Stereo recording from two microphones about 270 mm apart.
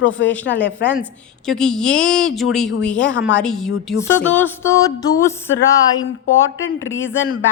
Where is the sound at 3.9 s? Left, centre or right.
Centre.